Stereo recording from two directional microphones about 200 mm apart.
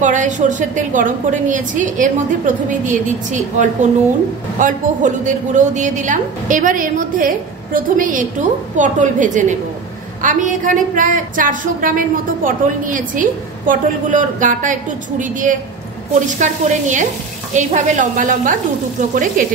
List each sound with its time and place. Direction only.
0.0 s a woman's voice: 40° right (ahead or behind)